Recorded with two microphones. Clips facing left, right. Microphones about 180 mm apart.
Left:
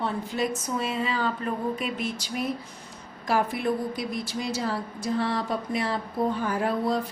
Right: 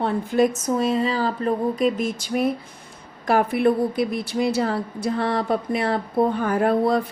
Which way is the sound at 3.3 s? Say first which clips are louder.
Right 7 dB; 60° right (ahead or behind).